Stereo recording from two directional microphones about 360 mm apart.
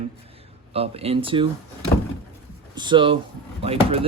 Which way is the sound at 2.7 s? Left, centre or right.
Centre.